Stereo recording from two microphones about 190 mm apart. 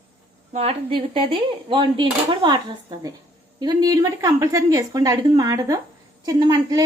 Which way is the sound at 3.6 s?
20° right (ahead or behind).